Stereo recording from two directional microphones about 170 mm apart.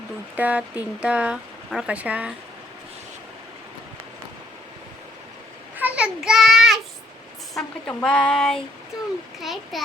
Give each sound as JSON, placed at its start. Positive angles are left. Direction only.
{"t": 0.3, "sound": "speech", "side_deg": -10}
{"t": 5.7, "sound": "a sound", "side_deg": -10}
{"t": 7.5, "sound": "speech", "side_deg": 5}